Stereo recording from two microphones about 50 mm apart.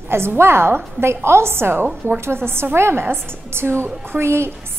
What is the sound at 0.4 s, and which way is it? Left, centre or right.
A woman's voice, right.